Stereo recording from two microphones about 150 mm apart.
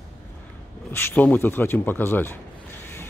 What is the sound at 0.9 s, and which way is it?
Speech, 15° left (ahead or behind).